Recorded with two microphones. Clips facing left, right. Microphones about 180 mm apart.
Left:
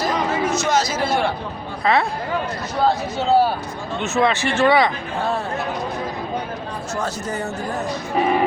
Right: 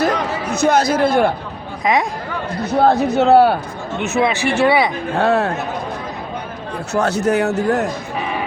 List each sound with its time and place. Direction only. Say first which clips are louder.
0.6 s a man's voice: right 6 dB; 60° right (ahead or behind)
1.8 s speech: right 1 dB; 15° right (ahead or behind)
2.7 s a man's voice: right 7 dB; 60° right (ahead or behind)
4.1 s speech: right 2 dB; 15° right (ahead or behind)
5.1 s speech: right 7 dB; 75° right (ahead or behind)
6.9 s speech: right 10 dB; 70° right (ahead or behind)